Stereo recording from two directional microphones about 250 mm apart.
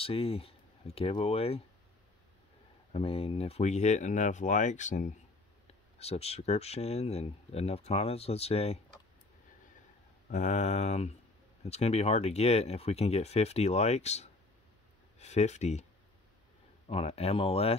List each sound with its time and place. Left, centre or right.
0.0 s speech: left
2.9 s speech: left
10.3 s speech: left
16.8 s speech: left